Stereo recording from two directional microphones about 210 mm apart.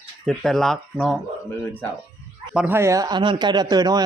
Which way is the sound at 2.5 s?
10° right (ahead or behind).